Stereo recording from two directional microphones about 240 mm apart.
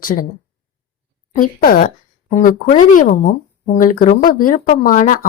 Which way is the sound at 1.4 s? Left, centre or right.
Left.